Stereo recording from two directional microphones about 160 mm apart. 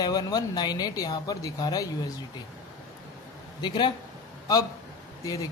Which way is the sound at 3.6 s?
30° left (ahead or behind).